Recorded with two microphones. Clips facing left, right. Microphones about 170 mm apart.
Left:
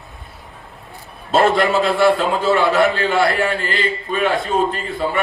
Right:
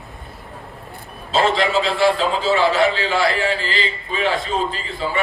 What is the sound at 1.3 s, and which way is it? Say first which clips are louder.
A man's voice: left 3 dB; 60° left (ahead or behind).